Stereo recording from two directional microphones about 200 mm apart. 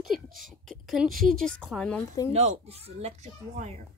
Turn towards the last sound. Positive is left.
turn(degrees=-35)  # may be behind; listen again after turning